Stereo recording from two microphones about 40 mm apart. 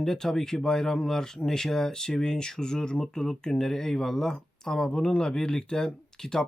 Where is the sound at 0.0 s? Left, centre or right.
Centre.